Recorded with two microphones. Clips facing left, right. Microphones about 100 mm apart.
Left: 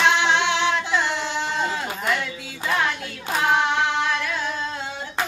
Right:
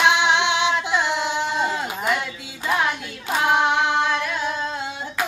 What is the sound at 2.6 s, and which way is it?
Female singing, 10° right (ahead or behind).